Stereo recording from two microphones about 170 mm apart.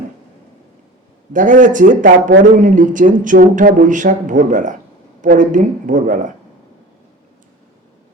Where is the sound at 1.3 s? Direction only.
50° right (ahead or behind).